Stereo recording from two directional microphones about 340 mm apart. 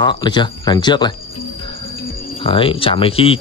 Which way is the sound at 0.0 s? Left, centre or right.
Centre.